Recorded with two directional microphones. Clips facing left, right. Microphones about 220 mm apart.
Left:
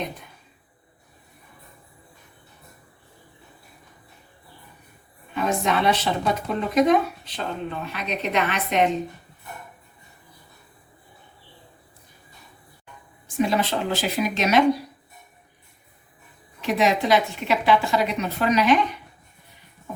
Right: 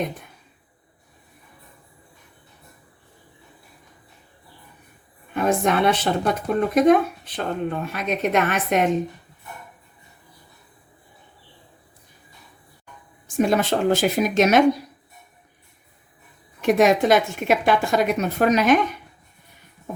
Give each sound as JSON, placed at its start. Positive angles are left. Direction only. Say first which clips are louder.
{"t": 5.3, "sound": "speech", "louder": "right 3 dB", "side_deg": -50}
{"t": 12.8, "sound": "speech", "louder": "right 1 dB", "side_deg": -45}
{"t": 16.6, "sound": "speech", "louder": "right 5 dB", "side_deg": -50}